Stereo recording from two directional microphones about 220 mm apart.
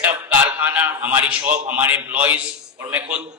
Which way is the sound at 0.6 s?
10° right (ahead or behind).